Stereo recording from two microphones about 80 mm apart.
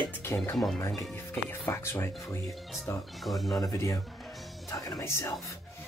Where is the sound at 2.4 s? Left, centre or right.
Centre.